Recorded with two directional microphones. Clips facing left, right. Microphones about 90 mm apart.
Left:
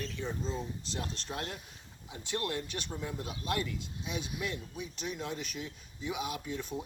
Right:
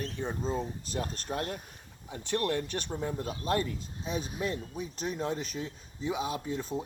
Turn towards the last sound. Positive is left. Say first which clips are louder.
# right 4 dB
turn(degrees=-35)  # may be behind; listen again after turning